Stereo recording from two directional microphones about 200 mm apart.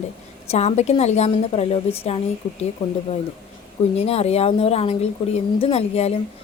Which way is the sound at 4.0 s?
30° left (ahead or behind).